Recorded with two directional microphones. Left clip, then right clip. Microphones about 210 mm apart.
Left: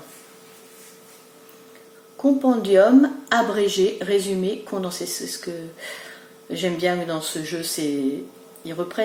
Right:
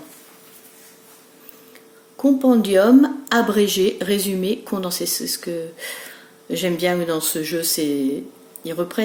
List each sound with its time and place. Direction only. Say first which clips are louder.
2.2 s a woman's voice: right 3 dB; 50° right (ahead or behind)